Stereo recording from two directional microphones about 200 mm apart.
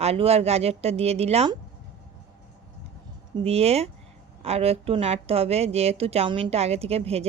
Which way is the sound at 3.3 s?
30° right (ahead or behind).